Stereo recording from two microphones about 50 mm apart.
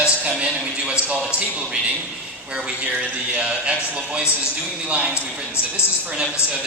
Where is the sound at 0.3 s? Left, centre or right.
Centre.